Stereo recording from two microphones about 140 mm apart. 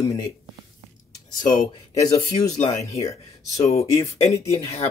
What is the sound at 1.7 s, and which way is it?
Speech, 25° left (ahead or behind).